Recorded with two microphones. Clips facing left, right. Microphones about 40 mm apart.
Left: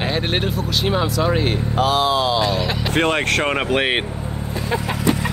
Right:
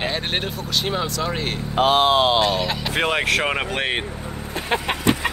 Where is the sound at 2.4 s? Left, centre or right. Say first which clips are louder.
Left 1 dB; centre.